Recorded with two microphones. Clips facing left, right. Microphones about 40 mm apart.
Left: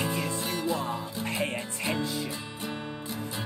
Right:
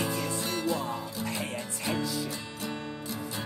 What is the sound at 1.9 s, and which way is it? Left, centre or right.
Music, left.